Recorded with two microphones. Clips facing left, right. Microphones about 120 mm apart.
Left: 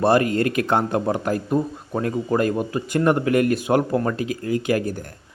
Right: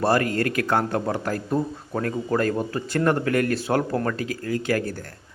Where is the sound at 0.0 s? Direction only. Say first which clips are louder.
Left 3 dB; 20° left (ahead or behind).